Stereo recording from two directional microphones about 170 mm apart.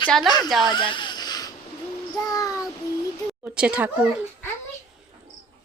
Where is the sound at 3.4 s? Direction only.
5° right (ahead or behind).